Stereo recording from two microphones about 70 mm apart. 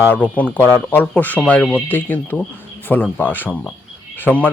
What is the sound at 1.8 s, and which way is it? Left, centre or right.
Speech, left.